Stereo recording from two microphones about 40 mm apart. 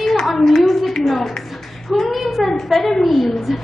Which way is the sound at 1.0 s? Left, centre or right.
Centre.